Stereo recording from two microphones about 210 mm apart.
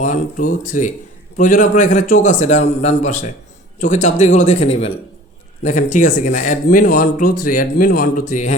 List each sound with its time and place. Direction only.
0.0 s speech: 35° left (ahead or behind)